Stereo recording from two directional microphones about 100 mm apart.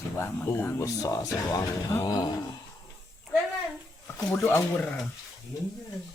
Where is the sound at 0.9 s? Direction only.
35° left (ahead or behind).